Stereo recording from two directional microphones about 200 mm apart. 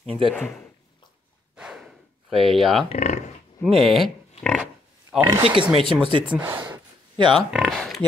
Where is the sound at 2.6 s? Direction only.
Centre (ahead or behind).